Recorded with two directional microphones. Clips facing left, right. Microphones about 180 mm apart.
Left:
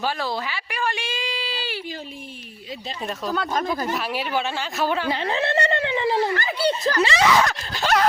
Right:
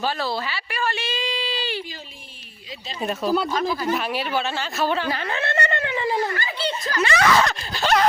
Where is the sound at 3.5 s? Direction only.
45° left (ahead or behind).